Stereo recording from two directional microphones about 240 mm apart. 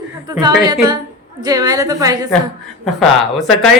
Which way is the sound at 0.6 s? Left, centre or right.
Centre.